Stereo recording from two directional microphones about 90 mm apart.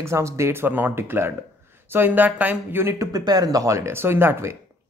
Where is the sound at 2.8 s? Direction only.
40° right (ahead or behind).